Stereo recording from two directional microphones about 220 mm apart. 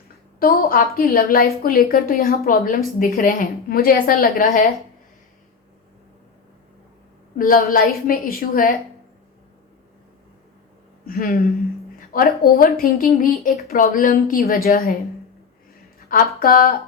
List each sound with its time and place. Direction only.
0.3 s a woman's voice: 40° left (ahead or behind)
7.3 s a woman's voice: 40° left (ahead or behind)
11.0 s a woman's voice: 40° left (ahead or behind)
16.0 s speech: 40° left (ahead or behind)